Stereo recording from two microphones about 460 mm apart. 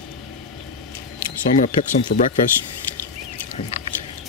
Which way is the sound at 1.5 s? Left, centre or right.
Centre.